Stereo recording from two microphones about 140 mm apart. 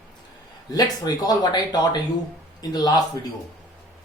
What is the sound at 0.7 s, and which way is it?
Speech, 25° left (ahead or behind).